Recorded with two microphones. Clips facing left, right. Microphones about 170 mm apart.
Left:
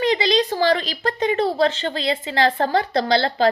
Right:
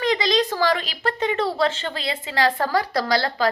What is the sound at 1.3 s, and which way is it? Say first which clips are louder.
A woman's voice: left 4 dB; 35° left (ahead or behind).